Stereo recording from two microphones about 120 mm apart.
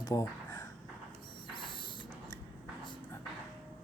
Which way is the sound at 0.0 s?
30° left (ahead or behind).